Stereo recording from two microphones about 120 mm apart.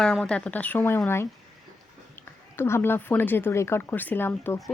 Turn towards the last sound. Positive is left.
turn(degrees=20)  # may be behind; listen again after turning